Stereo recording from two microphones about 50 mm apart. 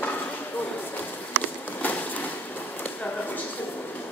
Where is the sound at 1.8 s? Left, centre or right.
Left.